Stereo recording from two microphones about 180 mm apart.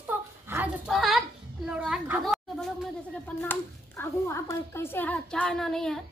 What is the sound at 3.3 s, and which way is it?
A child's voice, 10° left (ahead or behind).